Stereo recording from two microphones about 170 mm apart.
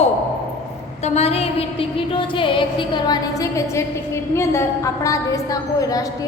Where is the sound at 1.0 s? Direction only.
40° left (ahead or behind).